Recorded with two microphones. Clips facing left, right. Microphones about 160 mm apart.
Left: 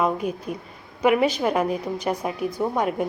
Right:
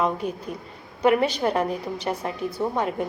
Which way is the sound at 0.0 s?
10° left (ahead or behind).